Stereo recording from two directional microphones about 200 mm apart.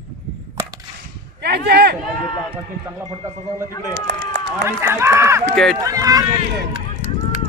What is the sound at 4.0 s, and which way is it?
Speech, 60° right (ahead or behind).